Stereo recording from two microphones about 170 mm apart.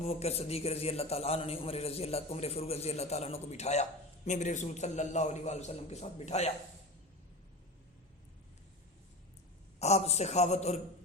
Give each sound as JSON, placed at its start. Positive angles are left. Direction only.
{"t": 0.0, "sound": "a man's voice", "side_deg": 40}
{"t": 9.7, "sound": "a man's voice", "side_deg": 40}